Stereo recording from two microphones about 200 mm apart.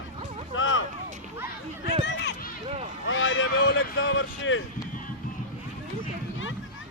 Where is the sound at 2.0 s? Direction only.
60° left (ahead or behind).